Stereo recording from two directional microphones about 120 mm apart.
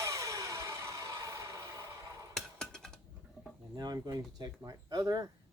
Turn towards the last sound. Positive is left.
turn(degrees=-35)  # may be behind; listen again after turning